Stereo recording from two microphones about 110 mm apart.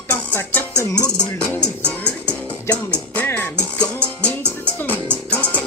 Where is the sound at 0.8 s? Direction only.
30° left (ahead or behind).